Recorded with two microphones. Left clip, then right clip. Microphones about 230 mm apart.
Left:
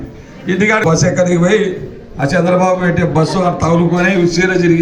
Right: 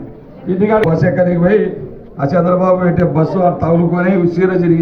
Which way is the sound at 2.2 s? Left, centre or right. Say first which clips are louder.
Left 1 dB; left.